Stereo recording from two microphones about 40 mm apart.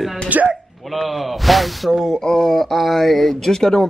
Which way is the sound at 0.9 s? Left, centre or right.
Centre.